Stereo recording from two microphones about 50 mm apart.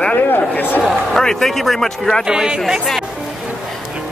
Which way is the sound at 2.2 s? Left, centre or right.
Centre.